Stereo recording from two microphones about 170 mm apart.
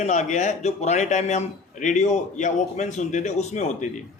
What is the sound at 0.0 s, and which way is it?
A man's voice, 45° left (ahead or behind).